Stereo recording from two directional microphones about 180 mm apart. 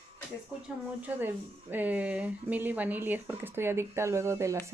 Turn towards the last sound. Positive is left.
turn(degrees=-15)  # may be behind; listen again after turning